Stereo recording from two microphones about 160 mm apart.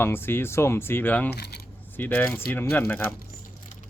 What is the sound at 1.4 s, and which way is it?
Speech, 90° left.